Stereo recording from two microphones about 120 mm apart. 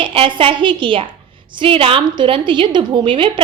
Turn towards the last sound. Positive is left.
turn(degrees=-45)  # may be behind; listen again after turning